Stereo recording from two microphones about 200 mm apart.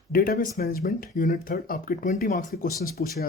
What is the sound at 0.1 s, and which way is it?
Speech, 45° left (ahead or behind).